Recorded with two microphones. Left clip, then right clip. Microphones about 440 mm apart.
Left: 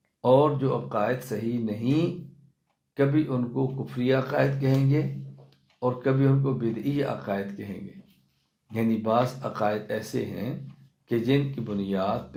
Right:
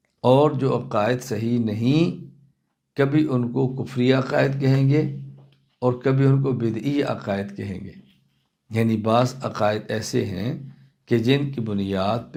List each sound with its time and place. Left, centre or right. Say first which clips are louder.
0.2 s speech: right 3 dB; right